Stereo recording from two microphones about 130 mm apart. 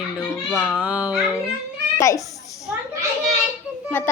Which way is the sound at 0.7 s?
10° right (ahead or behind).